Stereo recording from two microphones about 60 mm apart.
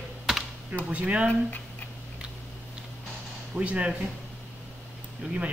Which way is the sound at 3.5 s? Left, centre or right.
Right.